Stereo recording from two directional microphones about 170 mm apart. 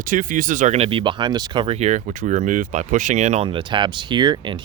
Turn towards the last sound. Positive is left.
turn(degrees=-25)  # may be behind; listen again after turning